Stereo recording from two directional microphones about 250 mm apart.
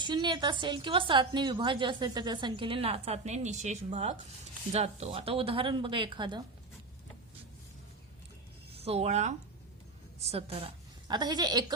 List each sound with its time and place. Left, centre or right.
0.0 s a woman's voice: centre
8.7 s a woman's voice: right